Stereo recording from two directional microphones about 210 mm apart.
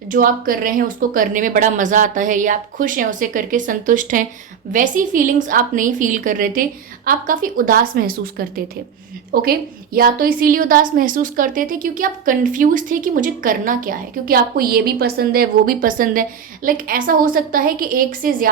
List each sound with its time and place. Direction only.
0.1 s a woman's voice: 40° right (ahead or behind)